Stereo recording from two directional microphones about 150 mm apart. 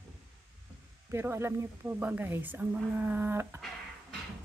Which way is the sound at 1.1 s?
15° right (ahead or behind).